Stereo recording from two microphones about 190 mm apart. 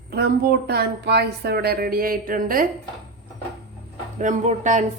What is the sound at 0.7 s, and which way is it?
Speech, 60° right (ahead or behind).